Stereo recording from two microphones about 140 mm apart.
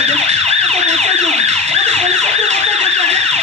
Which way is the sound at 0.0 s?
50° right (ahead or behind).